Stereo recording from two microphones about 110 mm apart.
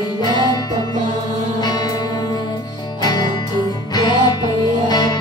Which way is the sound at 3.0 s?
40° left (ahead or behind).